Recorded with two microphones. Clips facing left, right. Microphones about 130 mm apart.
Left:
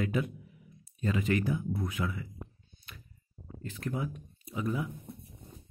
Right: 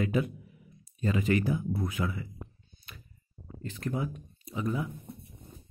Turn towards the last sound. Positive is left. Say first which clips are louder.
# right 1 dB
turn(degrees=5)  # may be behind; listen again after turning